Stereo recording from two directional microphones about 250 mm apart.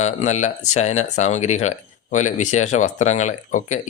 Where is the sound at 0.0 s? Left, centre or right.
Left.